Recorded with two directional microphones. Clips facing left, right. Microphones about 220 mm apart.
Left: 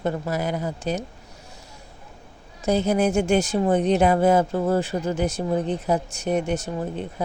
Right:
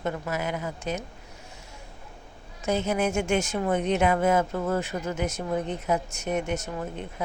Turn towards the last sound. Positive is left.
turn(degrees=30)  # may be behind; listen again after turning